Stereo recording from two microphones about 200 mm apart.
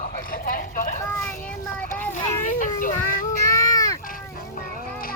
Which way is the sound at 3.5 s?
15° left (ahead or behind).